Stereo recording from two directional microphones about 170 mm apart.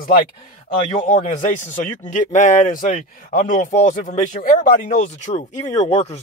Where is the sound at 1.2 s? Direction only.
45° left (ahead or behind).